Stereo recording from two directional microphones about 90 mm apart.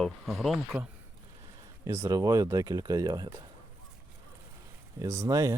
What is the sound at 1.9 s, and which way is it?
Speech, 35° right (ahead or behind).